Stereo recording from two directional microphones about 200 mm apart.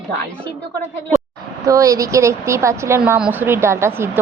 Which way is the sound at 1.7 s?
15° right (ahead or behind).